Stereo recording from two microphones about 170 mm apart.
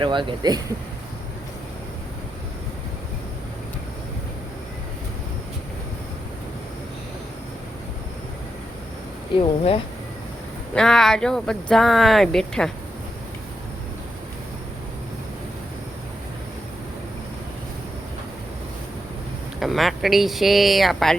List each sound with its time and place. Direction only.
0.0 s speech: 30° right (ahead or behind)
9.4 s speech: 35° left (ahead or behind)
10.8 s speech: 5° left (ahead or behind)
19.5 s speech: centre (ahead or behind)